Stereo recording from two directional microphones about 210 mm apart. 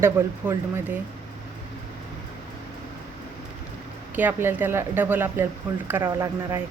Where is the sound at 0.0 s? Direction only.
10° right (ahead or behind).